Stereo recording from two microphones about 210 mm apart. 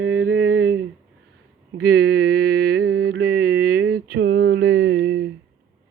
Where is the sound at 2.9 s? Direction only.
50° right (ahead or behind).